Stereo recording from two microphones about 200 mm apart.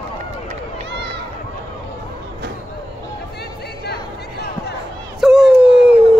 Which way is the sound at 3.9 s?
55° left (ahead or behind).